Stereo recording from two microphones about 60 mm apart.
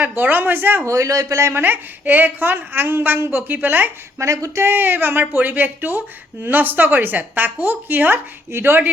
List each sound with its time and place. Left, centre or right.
0.0 s a woman's voice: right
0.9 s speech: right
1.6 s a woman's voice: right
4.2 s speech: right
4.6 s a woman's voice: right